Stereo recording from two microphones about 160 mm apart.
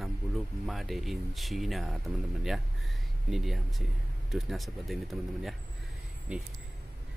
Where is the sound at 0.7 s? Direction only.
Centre (ahead or behind).